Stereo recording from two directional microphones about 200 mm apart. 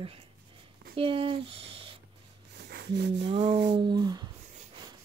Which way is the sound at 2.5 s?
55° right (ahead or behind).